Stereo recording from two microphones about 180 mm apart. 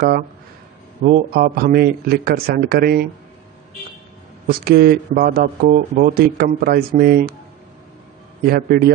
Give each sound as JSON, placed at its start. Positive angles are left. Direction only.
{"t": 1.0, "sound": "speech", "side_deg": -55}
{"t": 4.5, "sound": "speech", "side_deg": -60}
{"t": 8.5, "sound": "speech", "side_deg": -55}